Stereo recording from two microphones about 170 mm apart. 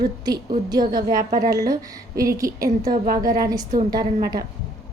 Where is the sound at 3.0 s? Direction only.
55° right (ahead or behind).